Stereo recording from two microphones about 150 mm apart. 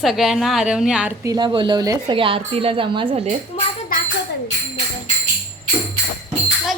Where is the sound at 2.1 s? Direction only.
35° right (ahead or behind).